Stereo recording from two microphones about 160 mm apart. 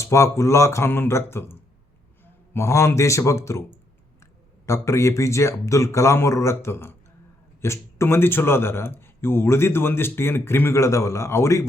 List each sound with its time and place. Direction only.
0.0 s speech: 20° left (ahead or behind)